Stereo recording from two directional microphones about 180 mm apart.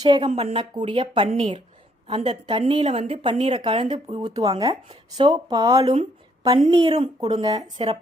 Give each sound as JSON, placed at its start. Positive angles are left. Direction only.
{"t": 0.2, "sound": "a woman's voice", "side_deg": -35}
{"t": 5.8, "sound": "a woman's voice", "side_deg": -35}
{"t": 6.4, "sound": "a woman's voice", "side_deg": -25}
{"t": 7.4, "sound": "a woman's voice", "side_deg": -20}